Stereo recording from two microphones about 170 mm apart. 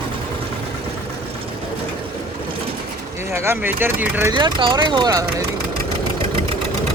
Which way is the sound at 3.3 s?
15° right (ahead or behind).